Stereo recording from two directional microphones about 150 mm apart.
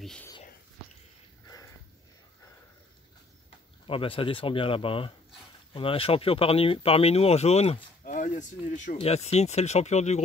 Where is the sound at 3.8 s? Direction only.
35° left (ahead or behind).